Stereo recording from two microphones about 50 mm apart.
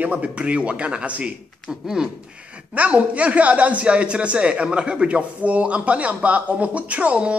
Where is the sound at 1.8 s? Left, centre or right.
Centre.